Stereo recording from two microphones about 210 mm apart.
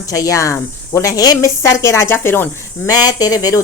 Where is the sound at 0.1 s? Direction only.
15° left (ahead or behind).